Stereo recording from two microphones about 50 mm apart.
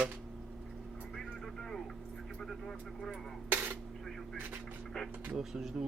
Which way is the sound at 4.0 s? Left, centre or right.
Centre.